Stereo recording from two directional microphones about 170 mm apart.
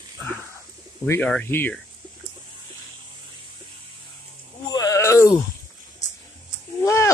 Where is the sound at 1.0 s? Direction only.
10° left (ahead or behind).